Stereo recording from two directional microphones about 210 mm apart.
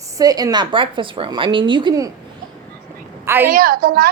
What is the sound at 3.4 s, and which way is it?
Speech, 45° right (ahead or behind).